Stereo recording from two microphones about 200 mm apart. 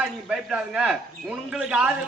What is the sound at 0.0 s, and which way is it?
A man's voice, 5° right (ahead or behind).